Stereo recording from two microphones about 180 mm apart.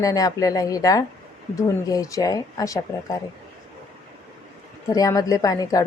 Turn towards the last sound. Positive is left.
turn(degrees=20)  # may be behind; listen again after turning